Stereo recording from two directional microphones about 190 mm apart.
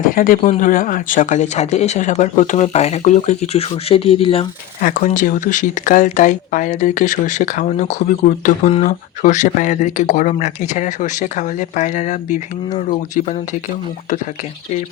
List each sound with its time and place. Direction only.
0.1 s speech: 45° left (ahead or behind); by 4.4 s 30° left (ahead or behind)
4.8 s speech: 45° left (ahead or behind)